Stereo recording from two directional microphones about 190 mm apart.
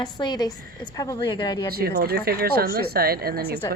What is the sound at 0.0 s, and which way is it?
A woman's voice, 20° left (ahead or behind).